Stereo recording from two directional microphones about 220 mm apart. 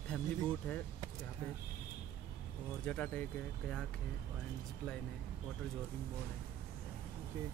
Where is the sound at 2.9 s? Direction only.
5° left (ahead or behind).